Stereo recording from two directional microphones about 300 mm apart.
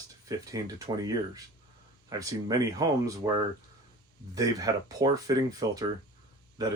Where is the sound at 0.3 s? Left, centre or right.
Centre.